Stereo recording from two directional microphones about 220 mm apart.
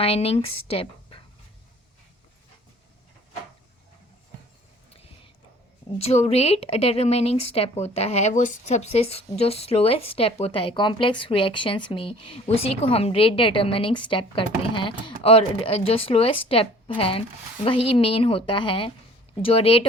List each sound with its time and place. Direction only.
0.0 s a woman's voice: 25° left (ahead or behind)
6.0 s a woman's voice: 30° left (ahead or behind)